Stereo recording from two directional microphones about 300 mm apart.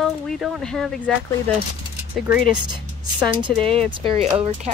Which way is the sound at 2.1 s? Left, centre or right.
Centre.